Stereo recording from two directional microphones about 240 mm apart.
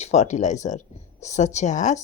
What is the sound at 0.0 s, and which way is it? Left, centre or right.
A woman's voice, left.